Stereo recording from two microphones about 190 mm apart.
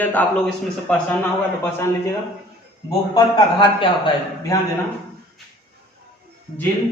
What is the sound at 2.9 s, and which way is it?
A man's voice, 25° left (ahead or behind).